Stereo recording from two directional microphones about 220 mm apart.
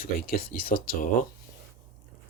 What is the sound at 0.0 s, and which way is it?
Speech, 40° left (ahead or behind).